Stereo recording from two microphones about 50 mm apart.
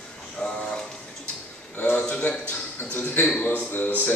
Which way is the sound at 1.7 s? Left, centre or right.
Left.